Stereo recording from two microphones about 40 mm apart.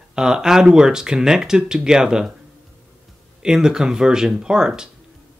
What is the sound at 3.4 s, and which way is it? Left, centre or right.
Speech, centre.